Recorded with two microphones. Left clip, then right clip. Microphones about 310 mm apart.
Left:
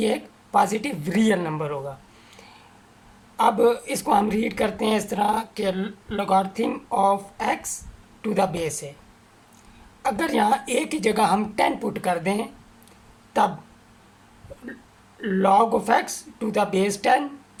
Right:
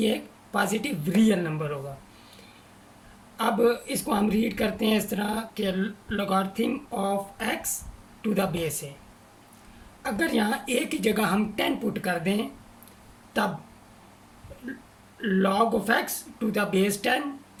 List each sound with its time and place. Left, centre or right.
0.0 s speech: centre
3.3 s a man's voice: centre
10.0 s speech: centre
15.2 s speech: centre